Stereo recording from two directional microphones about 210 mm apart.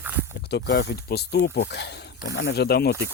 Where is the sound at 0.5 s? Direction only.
55° left (ahead or behind).